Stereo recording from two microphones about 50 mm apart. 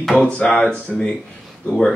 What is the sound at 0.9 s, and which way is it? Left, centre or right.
Speech, centre.